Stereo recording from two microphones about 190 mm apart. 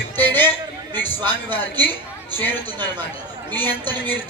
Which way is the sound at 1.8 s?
10° left (ahead or behind).